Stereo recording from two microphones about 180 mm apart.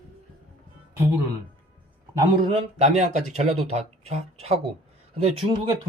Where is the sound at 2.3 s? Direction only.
35° right (ahead or behind).